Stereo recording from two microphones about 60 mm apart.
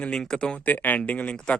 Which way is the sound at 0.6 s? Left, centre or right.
Left.